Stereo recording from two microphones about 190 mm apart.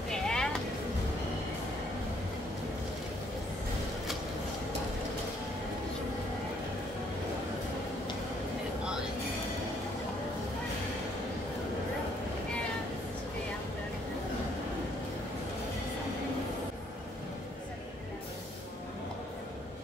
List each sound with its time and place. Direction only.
0.1 s music: 5° left (ahead or behind)